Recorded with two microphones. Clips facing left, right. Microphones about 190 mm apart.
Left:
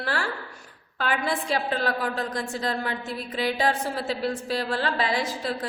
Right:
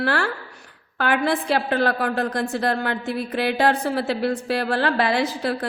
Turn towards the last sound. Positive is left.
turn(degrees=-65)  # may be behind; listen again after turning